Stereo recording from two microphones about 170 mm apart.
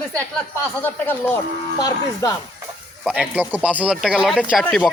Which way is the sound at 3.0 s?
5° right (ahead or behind).